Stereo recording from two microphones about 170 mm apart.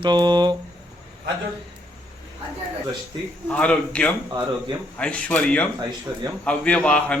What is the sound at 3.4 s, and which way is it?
Mantra, 10° left (ahead or behind).